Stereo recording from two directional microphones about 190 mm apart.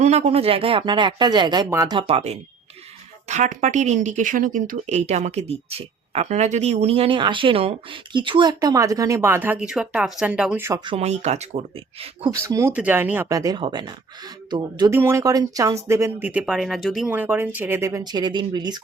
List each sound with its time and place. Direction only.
0.0 s speech: 35° right (ahead or behind); by 10.8 s 10° right (ahead or behind)
10.8 s speech: 35° right (ahead or behind)
12.3 s speech: 15° right (ahead or behind)